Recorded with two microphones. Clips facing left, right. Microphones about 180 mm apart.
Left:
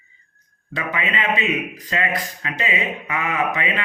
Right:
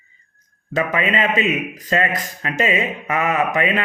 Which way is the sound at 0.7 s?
45° right (ahead or behind).